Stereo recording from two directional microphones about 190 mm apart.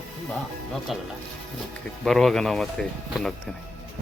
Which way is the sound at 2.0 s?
Centre (ahead or behind).